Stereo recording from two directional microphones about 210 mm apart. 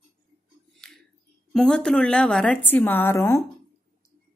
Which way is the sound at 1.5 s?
5° left (ahead or behind).